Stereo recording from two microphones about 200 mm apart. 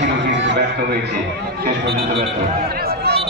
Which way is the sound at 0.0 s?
60° right (ahead or behind).